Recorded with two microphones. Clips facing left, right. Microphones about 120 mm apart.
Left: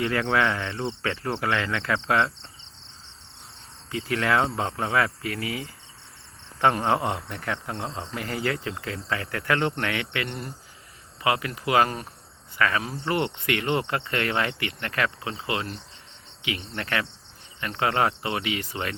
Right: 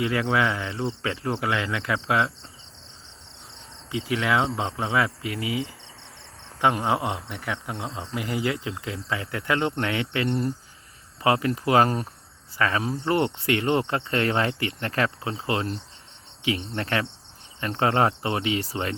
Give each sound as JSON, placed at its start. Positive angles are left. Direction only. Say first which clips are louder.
{"t": 0.0, "sound": "speech", "louder": "even", "side_deg": -10}
{"t": 3.9, "sound": "speech", "louder": "even", "side_deg": -10}
{"t": 11.2, "sound": "cricket", "louder": "right 3 dB", "side_deg": -35}